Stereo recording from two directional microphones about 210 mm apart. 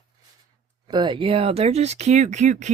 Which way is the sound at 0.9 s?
20° right (ahead or behind).